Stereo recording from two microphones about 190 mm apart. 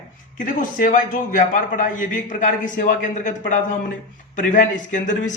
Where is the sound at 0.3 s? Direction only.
45° left (ahead or behind).